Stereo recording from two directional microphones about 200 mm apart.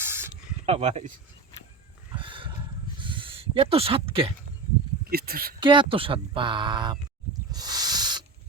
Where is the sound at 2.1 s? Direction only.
25° right (ahead or behind).